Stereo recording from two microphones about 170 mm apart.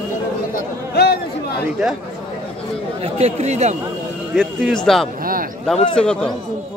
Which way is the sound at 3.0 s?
40° right (ahead or behind).